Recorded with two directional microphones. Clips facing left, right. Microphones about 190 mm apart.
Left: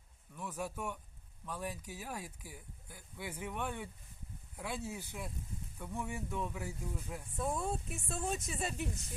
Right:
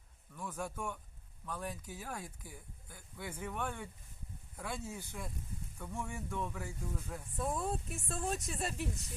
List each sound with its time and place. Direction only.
0.3 s a man's voice: 10° left (ahead or behind)